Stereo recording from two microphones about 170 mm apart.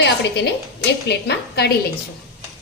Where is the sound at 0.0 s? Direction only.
80° left.